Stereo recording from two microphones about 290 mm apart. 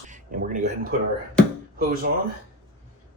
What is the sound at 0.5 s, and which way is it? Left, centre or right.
Speech, right.